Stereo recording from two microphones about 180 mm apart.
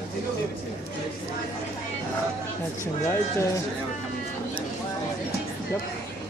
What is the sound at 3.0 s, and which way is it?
Speech, 15° left (ahead or behind).